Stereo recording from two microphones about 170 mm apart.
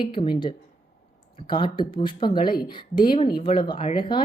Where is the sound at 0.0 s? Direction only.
30° left (ahead or behind).